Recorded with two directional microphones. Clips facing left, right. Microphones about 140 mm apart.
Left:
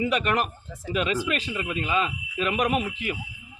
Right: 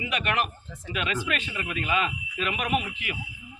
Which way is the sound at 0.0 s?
40° left (ahead or behind).